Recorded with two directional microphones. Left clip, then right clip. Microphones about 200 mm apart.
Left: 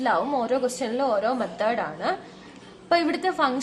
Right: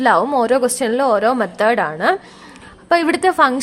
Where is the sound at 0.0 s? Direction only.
55° right (ahead or behind).